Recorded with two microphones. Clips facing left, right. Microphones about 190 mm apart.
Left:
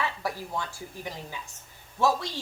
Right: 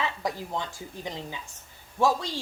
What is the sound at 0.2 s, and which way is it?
Speech, 20° right (ahead or behind).